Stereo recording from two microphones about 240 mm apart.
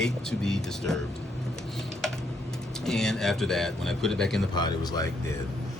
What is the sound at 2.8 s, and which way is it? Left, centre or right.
Speech, centre.